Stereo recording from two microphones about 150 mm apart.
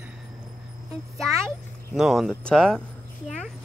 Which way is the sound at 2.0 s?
Centre (ahead or behind).